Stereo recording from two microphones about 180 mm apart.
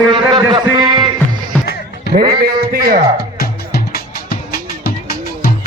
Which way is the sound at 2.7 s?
55° right (ahead or behind).